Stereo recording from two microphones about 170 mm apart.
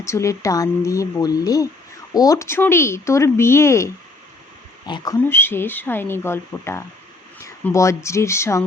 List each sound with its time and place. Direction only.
0.0 s speech: 15° left (ahead or behind)
4.9 s speech: 25° left (ahead or behind)
5.3 s speech: 15° left (ahead or behind)